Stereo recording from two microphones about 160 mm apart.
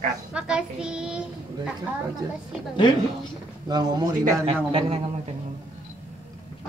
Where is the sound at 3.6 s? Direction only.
25° right (ahead or behind).